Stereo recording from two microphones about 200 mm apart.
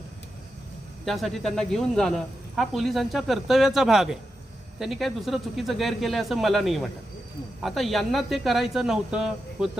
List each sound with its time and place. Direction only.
1.0 s speech: centre (ahead or behind)